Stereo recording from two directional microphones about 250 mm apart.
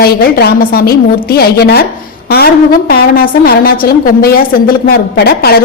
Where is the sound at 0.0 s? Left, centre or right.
Left.